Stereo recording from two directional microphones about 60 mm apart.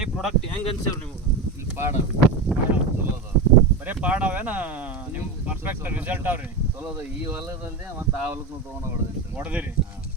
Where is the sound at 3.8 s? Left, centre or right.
Right.